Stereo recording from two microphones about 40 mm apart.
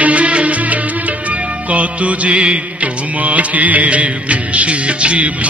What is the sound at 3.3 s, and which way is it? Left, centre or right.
Music, right.